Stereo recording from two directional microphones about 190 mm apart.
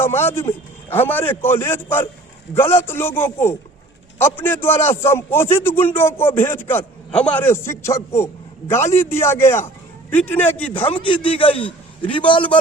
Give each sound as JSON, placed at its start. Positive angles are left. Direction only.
{"t": 0.0, "sound": "a man's voice", "side_deg": 10}
{"t": 10.9, "sound": "a man's voice", "side_deg": 30}